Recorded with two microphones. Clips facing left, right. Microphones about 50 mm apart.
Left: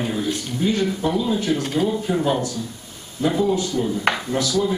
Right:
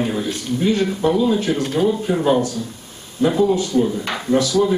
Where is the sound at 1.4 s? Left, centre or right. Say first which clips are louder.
Right 2 dB; right.